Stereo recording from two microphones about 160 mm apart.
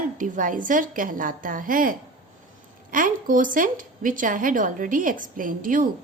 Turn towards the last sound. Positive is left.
turn(degrees=-55)  # may be behind; listen again after turning